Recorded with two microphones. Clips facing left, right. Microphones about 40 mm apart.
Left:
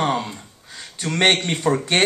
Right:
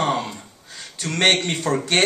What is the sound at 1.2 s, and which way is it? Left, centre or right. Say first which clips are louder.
Speech: left 1 dB; centre.